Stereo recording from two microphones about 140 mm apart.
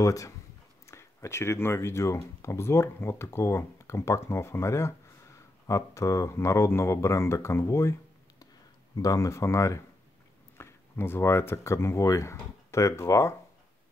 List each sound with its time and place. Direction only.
0.0 s speech: 25° left (ahead or behind)
8.9 s speech: 25° left (ahead or behind)